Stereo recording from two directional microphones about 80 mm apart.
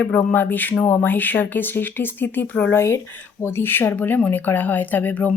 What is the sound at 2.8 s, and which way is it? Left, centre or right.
Speech, left.